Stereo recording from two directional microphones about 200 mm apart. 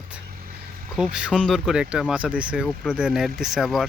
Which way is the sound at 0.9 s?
5° right (ahead or behind).